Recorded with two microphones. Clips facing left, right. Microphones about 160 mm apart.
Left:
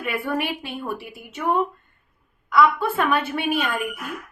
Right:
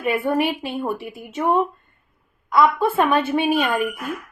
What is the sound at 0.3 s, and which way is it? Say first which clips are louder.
Speech: right 5 dB; 20° right (ahead or behind).